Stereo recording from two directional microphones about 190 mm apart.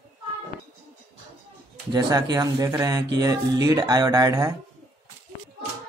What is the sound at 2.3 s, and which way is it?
Speech, 20° right (ahead or behind).